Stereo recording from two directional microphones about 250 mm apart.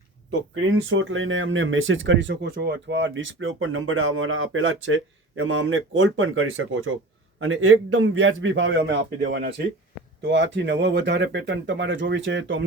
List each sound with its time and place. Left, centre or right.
0.3 s speech: right